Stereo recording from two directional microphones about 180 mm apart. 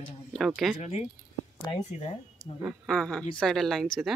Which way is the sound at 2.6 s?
Centre (ahead or behind).